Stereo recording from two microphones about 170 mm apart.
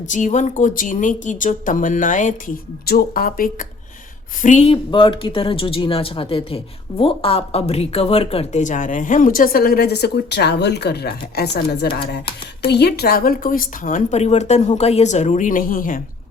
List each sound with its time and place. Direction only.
0.1 s speech: 45° left (ahead or behind)
2.8 s speech: 65° left (ahead or behind)
4.4 s speech: 40° left (ahead or behind)